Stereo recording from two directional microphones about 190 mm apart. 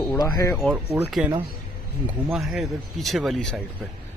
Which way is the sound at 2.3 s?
Centre (ahead or behind).